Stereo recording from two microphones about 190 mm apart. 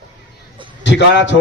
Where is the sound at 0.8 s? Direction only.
70° left (ahead or behind).